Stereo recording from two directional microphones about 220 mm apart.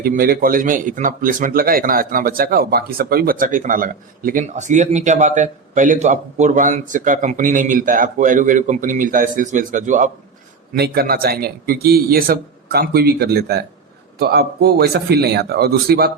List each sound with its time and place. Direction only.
0.0 s a man's voice: 40° right (ahead or behind)
10.8 s a man's voice: 45° right (ahead or behind)